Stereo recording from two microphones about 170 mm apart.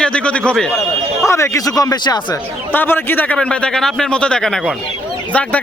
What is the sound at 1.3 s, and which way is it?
Speech, 15° left (ahead or behind).